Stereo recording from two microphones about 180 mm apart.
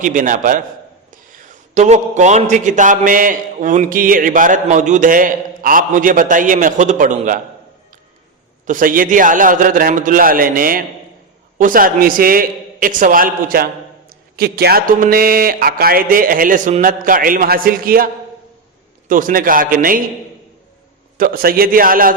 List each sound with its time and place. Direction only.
0.0 s a man's voice: 45° right (ahead or behind)
1.7 s a man's voice: 40° right (ahead or behind)
8.6 s a man's voice: 50° right (ahead or behind)
21.2 s a man's voice: 55° right (ahead or behind)